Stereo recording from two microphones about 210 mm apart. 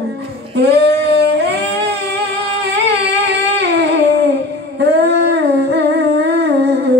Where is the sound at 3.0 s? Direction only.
55° right (ahead or behind).